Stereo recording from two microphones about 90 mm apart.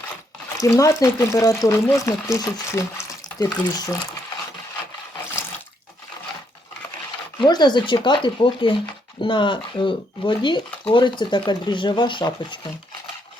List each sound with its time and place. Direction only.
0.6 s speech: 35° left (ahead or behind)
3.1 s a sound: 50° left (ahead or behind)
7.3 s speech: 50° left (ahead or behind)